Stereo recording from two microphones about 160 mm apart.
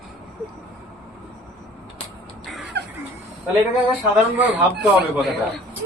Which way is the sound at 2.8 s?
90° right.